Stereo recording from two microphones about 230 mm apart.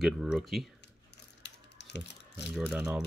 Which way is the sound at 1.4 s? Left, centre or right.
Left.